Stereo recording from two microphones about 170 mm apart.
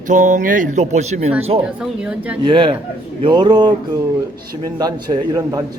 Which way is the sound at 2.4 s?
30° right (ahead or behind).